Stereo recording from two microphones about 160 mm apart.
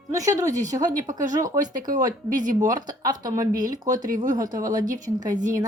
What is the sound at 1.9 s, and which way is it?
Speech, 55° right (ahead or behind).